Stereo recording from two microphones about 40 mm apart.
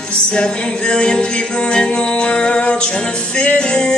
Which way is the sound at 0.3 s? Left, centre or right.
Left.